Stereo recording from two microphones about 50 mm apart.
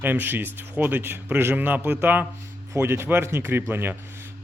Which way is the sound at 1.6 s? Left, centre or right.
Right.